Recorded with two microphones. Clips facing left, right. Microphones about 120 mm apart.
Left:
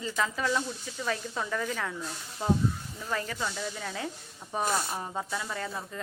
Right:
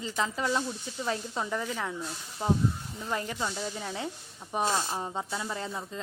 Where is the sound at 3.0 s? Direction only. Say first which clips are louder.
Right 1 dB; 25° right (ahead or behind).